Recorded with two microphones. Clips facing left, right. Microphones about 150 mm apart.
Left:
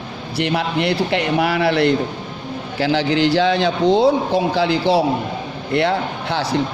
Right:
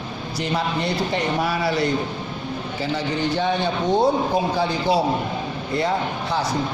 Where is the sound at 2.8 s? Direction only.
85° left.